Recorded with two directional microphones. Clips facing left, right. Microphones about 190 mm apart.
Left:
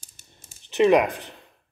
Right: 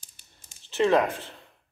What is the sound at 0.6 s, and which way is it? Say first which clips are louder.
Speech: left 4 dB; 15° left (ahead or behind).